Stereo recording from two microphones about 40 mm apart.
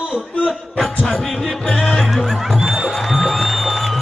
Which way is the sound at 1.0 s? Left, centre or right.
Centre.